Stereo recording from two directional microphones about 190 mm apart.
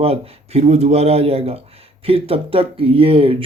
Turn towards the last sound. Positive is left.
turn(degrees=-30)  # may be behind; listen again after turning